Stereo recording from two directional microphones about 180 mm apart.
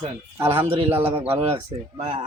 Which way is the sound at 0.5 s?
30° right (ahead or behind).